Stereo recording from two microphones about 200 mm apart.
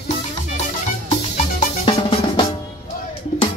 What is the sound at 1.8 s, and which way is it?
Drum, 25° left (ahead or behind).